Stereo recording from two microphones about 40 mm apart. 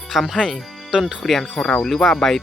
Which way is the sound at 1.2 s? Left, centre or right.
Centre.